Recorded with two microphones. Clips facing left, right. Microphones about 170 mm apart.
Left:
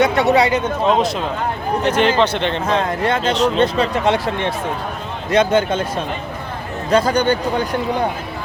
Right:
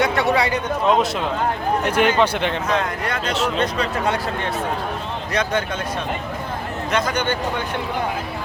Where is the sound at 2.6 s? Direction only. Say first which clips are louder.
Left 4 dB; 25° left (ahead or behind).